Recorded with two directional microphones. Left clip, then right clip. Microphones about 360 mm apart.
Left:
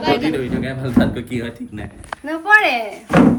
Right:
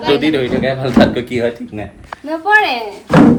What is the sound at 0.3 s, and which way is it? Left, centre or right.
Speech, centre.